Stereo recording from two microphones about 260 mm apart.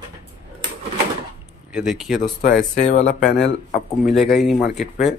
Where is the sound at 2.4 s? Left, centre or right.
Left.